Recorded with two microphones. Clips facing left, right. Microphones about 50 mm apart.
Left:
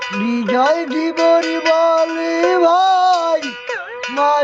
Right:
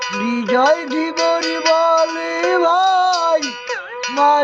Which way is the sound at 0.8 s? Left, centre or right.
Centre.